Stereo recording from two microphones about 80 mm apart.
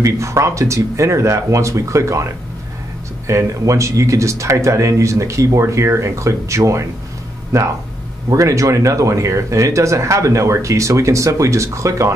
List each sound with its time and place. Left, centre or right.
0.0 s speech: right